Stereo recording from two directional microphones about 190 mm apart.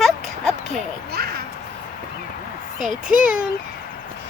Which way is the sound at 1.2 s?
50° right (ahead or behind).